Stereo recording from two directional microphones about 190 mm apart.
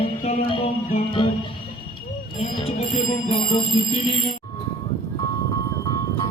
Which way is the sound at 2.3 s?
30° left (ahead or behind).